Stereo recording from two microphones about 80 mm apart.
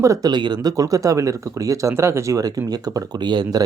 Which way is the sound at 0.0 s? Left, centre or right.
Right.